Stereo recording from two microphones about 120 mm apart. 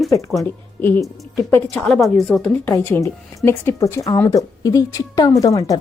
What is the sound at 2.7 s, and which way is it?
Speech, 20° left (ahead or behind).